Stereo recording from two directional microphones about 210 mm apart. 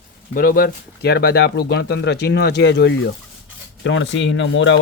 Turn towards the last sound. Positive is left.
turn(degrees=60)  # may be behind; listen again after turning